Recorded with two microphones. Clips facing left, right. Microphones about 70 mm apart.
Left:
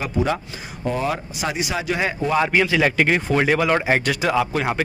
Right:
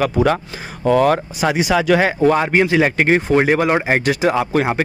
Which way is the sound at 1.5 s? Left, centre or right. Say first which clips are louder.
Right 10 dB; right.